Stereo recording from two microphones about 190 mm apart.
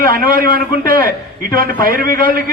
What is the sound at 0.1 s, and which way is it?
A man's voice, 50° right (ahead or behind).